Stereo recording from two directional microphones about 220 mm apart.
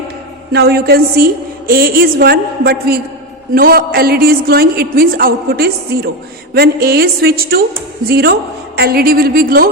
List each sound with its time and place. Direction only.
0.5 s a woman's voice: 45° right (ahead or behind)